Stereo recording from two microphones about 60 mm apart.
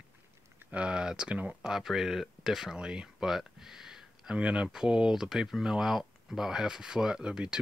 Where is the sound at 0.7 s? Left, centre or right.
Centre.